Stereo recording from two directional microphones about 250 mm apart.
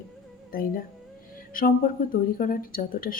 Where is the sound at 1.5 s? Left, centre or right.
Left.